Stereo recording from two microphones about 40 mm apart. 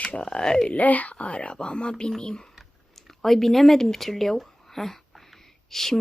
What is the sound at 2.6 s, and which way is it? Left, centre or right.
Speech, centre.